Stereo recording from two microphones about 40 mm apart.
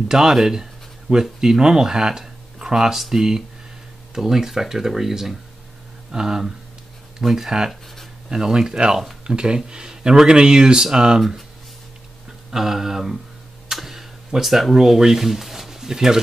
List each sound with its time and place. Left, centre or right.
0.1 s speech: centre
12.4 s speech: centre
13.7 s a sound: centre